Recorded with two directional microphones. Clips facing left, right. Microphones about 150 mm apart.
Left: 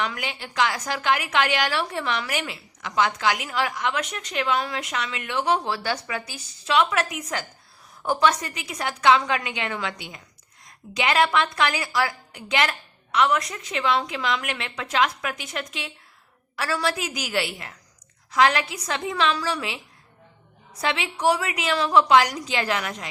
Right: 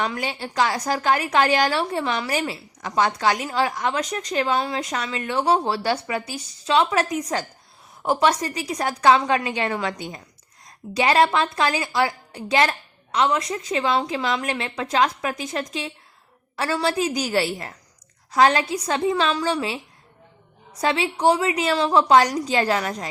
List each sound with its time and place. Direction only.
0.0 s a woman's voice: 35° right (ahead or behind)
20.8 s a woman's voice: 35° right (ahead or behind)